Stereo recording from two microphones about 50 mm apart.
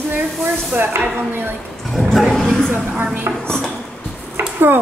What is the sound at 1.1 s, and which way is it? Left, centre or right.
Speech, right.